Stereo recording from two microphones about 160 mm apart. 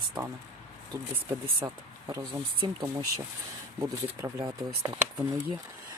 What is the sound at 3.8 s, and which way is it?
Speech, 20° right (ahead or behind).